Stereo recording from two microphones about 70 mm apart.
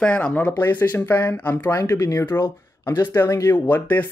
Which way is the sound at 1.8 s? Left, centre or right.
Left.